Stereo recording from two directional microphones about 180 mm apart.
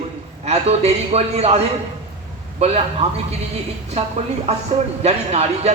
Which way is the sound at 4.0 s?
35° right (ahead or behind).